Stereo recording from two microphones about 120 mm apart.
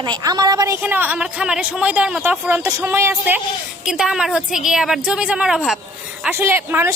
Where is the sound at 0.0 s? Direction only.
35° right (ahead or behind).